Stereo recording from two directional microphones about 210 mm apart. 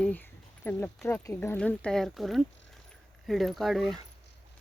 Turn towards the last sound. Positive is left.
turn(degrees=0)  # may be behind; listen again after turning